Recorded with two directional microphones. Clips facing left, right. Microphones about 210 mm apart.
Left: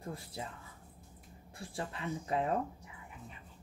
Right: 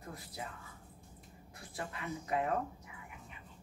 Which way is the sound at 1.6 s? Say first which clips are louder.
Left 3 dB; 30° left (ahead or behind).